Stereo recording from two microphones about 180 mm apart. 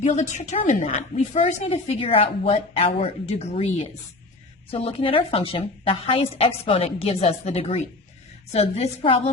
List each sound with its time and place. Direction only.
0.0 s a woman's voice: 40° left (ahead or behind)